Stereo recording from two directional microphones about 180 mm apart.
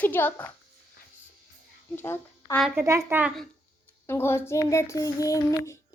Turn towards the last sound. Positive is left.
turn(degrees=20)  # may be behind; listen again after turning